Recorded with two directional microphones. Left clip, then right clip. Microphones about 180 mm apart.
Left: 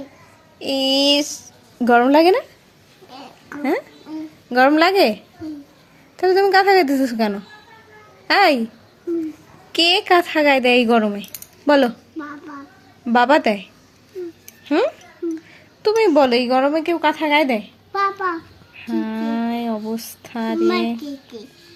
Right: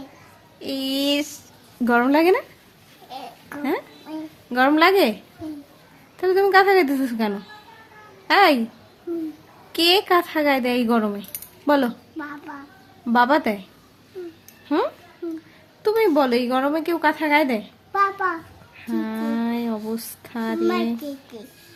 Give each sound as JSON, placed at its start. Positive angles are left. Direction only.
{"t": 0.6, "sound": "speech", "side_deg": 20}
{"t": 0.9, "sound": "speech", "side_deg": -25}
{"t": 1.8, "sound": "speech", "side_deg": 15}
{"t": 3.6, "sound": "speech", "side_deg": 20}
{"t": 6.1, "sound": "speech", "side_deg": 20}
{"t": 9.7, "sound": "speech", "side_deg": 10}
{"t": 13.1, "sound": "speech", "side_deg": 20}
{"t": 14.8, "sound": "speech", "side_deg": 10}
{"t": 17.9, "sound": "a child's voice", "side_deg": -20}
{"t": 18.8, "sound": "a sound", "side_deg": 10}
{"t": 20.6, "sound": "speech", "side_deg": -25}